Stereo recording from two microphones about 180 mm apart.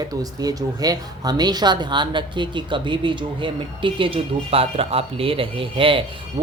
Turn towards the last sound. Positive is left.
turn(degrees=-30)  # may be behind; listen again after turning